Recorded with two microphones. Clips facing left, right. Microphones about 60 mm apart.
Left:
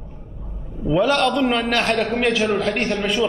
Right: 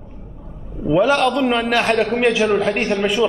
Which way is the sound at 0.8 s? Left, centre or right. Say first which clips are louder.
Right 2 dB; centre.